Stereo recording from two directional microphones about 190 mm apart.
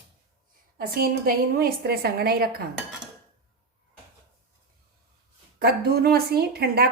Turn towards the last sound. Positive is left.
turn(degrees=-55)  # may be behind; listen again after turning